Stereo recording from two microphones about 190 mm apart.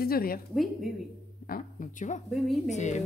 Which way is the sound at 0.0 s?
50° left (ahead or behind).